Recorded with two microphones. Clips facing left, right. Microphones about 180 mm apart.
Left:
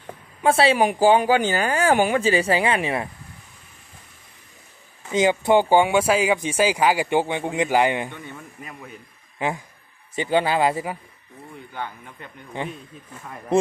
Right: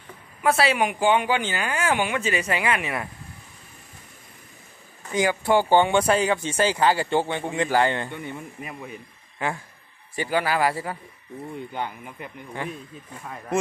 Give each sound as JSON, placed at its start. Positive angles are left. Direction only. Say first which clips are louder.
{"t": 0.4, "sound": "speech", "louder": "left 4 dB", "side_deg": 30}
{"t": 5.1, "sound": "speech", "louder": "left 3 dB", "side_deg": 20}
{"t": 8.1, "sound": "a man's voice", "louder": "right 4 dB", "side_deg": -15}
{"t": 10.1, "sound": "speech", "louder": "left 3 dB", "side_deg": 20}
{"t": 11.7, "sound": "a man's voice", "louder": "right 2 dB", "side_deg": -15}